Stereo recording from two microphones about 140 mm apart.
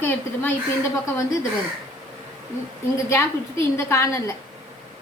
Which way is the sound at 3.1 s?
20° left (ahead or behind).